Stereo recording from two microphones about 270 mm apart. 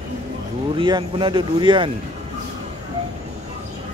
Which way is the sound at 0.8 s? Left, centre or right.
Centre.